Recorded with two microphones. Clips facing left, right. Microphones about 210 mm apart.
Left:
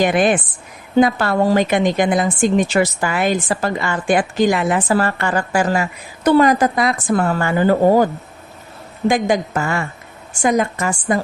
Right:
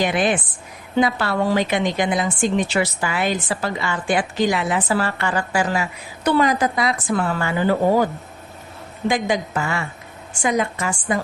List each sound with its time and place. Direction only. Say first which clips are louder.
0.0 s a woman's voice: left 4 dB; 50° left (ahead or behind)